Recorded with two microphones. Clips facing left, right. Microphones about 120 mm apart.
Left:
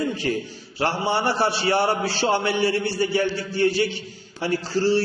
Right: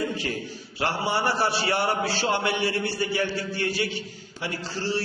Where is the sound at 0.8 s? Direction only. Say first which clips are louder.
Left 3 dB; 30° left (ahead or behind).